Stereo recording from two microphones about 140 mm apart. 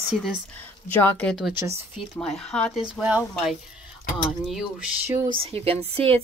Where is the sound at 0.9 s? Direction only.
15° left (ahead or behind).